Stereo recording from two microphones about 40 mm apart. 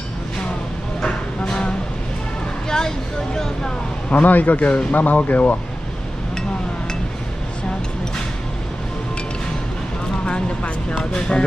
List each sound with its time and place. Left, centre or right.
1.0 s a sound: left
4.1 s speech: left
10.2 s speech: left